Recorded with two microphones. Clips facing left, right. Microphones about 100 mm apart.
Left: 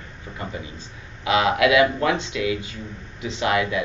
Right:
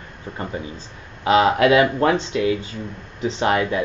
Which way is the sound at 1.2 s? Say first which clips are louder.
Right 4 dB; 35° right (ahead or behind).